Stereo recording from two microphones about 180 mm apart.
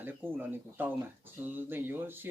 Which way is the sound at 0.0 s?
10° right (ahead or behind).